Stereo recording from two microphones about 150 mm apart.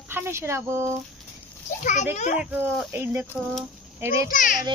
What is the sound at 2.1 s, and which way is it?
Speech, 55° left (ahead or behind).